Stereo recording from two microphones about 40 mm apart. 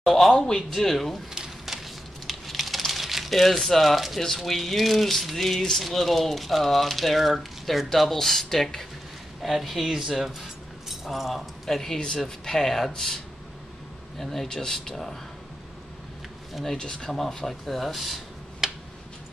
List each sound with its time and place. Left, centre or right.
0.0 s speech: centre
1.3 s a sound: centre
2.2 s crumpling: centre
4.2 s speech: centre
9.4 s speech: centre
9.8 s speech: centre
10.9 s keys jangling: centre
11.7 s speech: centre
16.7 s speech: centre
17.5 s speech: centre
18.6 s a sound: centre